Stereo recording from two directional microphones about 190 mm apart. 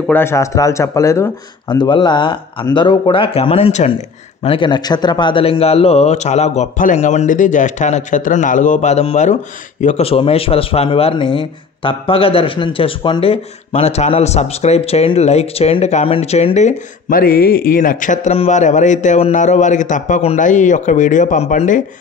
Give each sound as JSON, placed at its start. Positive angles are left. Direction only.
{"t": 0.0, "sound": "a man's voice", "side_deg": 10}